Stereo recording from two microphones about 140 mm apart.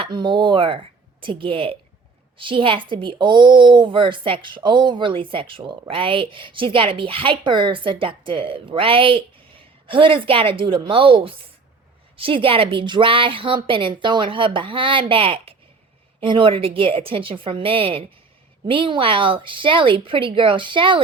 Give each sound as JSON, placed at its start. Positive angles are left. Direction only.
{"t": 0.0, "sound": "speech", "side_deg": -35}